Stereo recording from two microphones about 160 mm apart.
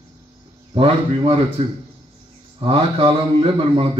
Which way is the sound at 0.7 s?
35° right (ahead or behind).